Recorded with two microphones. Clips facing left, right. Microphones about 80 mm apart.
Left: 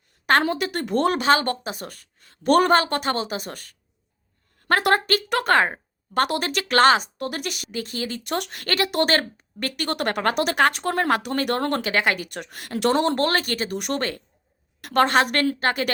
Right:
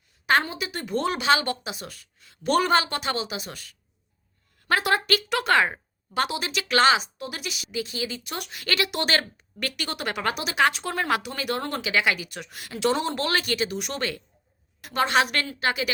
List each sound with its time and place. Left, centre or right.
0.5 s a woman's voice: left
6.2 s speech: left
14.8 s speech: left